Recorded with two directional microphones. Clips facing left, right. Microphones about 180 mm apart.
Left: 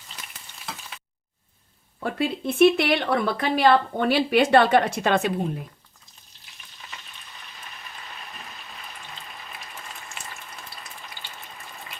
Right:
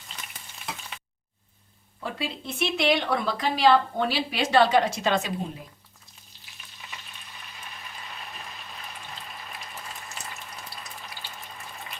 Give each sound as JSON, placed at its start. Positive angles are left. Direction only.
{"t": 2.0, "sound": "speech", "side_deg": 55}